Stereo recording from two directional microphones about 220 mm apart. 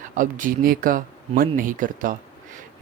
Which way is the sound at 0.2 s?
35° right (ahead or behind).